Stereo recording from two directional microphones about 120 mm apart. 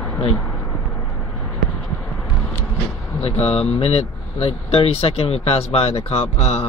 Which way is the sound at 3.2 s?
55° left (ahead or behind).